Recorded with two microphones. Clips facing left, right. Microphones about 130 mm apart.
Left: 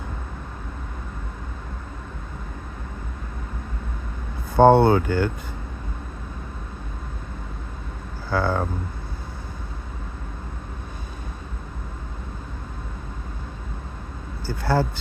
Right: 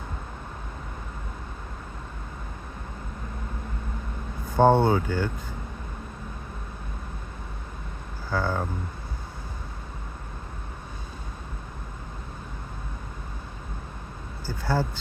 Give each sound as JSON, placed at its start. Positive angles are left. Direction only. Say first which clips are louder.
{"t": 4.5, "sound": "speech", "louder": "left 5 dB", "side_deg": 70}
{"t": 8.3, "sound": "speech", "louder": "left 4 dB", "side_deg": 70}
{"t": 14.4, "sound": "vehicle", "louder": "left 4 dB", "side_deg": 70}